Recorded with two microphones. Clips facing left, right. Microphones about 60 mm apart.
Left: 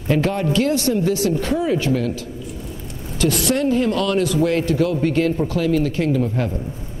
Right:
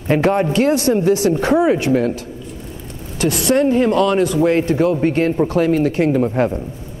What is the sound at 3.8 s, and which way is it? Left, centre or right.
A man's voice, centre.